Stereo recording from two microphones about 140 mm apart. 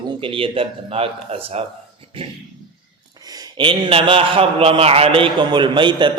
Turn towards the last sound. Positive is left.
turn(degrees=-35)  # may be behind; listen again after turning